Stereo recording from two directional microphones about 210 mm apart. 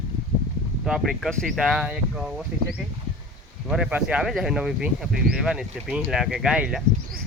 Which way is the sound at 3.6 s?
5° right (ahead or behind).